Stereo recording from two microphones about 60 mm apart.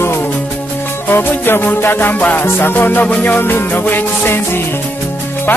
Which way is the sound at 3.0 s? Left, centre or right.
Left.